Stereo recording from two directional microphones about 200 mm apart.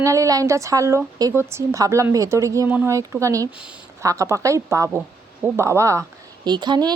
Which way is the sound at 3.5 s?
5° right (ahead or behind).